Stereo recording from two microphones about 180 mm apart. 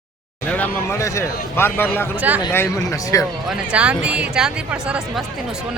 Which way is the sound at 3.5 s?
5° right (ahead or behind).